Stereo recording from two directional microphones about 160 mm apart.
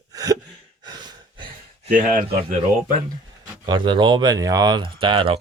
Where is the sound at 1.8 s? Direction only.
60° right (ahead or behind).